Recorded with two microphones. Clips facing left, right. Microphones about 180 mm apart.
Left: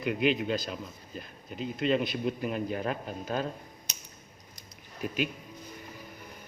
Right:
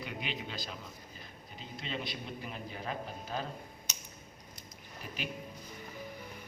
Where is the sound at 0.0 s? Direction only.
50° left (ahead or behind).